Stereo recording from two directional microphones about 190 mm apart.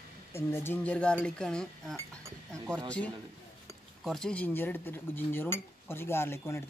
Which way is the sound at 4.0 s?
Centre (ahead or behind).